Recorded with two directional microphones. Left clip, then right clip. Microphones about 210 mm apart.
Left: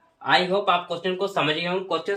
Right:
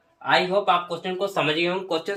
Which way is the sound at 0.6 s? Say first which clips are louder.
Even; 25° left (ahead or behind).